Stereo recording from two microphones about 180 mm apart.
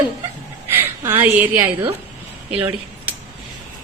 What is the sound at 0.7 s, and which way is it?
A woman's voice, 10° right (ahead or behind).